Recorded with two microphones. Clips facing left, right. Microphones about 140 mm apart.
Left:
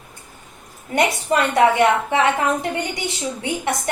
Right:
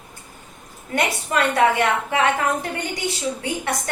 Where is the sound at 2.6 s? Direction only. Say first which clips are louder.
Left 2 dB; 25° left (ahead or behind).